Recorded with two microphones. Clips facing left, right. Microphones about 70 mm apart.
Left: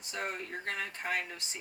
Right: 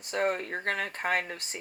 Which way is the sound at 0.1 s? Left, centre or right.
Right.